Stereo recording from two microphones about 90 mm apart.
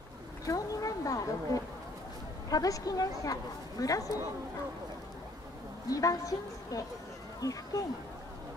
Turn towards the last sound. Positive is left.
turn(degrees=40)  # may be behind; listen again after turning